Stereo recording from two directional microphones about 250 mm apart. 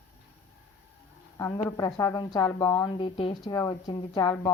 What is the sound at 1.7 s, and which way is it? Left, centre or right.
A woman's voice, centre.